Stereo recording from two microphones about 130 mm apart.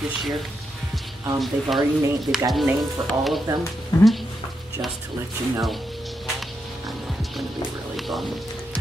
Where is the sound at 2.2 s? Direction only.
Centre (ahead or behind).